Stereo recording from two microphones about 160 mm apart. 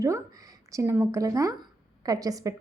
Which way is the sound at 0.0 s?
20° right (ahead or behind).